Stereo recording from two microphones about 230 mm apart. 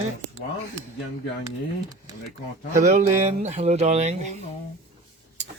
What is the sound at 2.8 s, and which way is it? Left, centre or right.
Speech, right.